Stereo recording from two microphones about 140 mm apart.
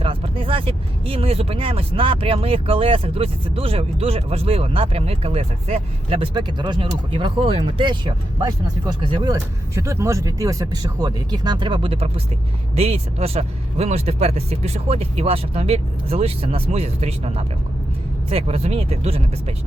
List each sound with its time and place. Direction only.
0.0 s speech: 40° right (ahead or behind)
9.7 s speech: 20° right (ahead or behind); by 19.5 s 45° right (ahead or behind)